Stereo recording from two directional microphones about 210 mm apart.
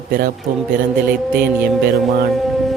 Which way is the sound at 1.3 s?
45° right (ahead or behind).